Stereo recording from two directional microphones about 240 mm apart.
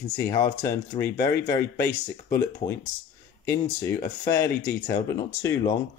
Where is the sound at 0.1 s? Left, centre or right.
Centre.